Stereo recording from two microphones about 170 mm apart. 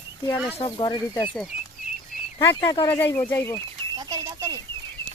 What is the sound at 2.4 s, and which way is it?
Speech, 15° left (ahead or behind).